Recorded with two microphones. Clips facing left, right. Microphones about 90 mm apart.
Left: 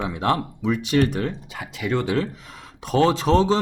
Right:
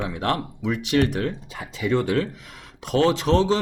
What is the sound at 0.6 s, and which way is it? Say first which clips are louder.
Speech: right 1 dB; 35° left (ahead or behind).